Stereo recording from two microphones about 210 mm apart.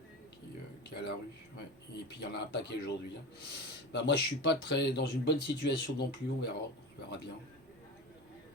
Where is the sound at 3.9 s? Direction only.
55° left (ahead or behind).